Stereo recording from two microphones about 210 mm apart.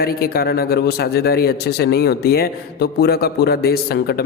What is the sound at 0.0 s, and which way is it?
Speech, 45° left (ahead or behind).